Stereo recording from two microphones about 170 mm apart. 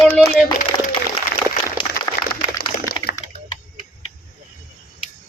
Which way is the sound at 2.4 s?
25° left (ahead or behind).